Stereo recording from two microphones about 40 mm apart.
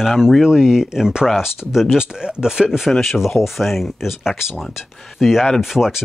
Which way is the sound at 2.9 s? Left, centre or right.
Centre.